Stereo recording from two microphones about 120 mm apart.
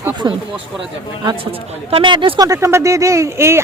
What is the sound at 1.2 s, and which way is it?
Speech, 45° right (ahead or behind).